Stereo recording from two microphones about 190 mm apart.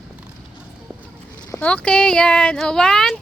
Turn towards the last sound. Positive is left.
turn(degrees=0)  # may be behind; listen again after turning